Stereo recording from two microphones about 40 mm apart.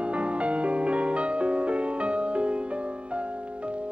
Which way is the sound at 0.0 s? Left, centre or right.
Right.